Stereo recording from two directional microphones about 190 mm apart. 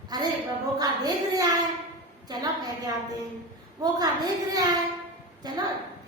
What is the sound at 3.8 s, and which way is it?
A woman's voice, 20° right (ahead or behind).